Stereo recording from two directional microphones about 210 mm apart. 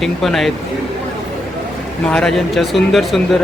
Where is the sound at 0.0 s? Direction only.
Centre (ahead or behind).